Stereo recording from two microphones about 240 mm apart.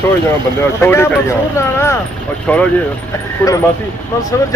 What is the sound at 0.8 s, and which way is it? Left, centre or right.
Speech, centre.